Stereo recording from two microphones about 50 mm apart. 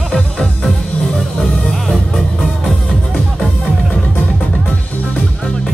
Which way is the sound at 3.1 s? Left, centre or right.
Left.